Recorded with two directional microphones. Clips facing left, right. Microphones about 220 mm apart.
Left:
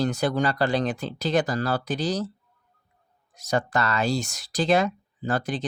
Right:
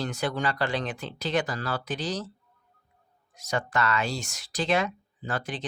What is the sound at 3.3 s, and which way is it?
Speech, 40° left (ahead or behind).